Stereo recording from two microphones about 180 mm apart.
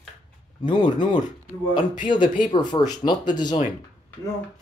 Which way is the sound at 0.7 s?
25° left (ahead or behind).